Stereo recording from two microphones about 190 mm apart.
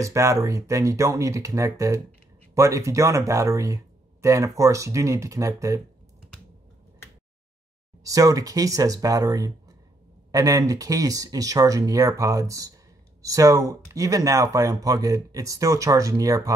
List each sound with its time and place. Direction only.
0.0 s speech: 15° right (ahead or behind)
8.0 s speech: 20° right (ahead or behind)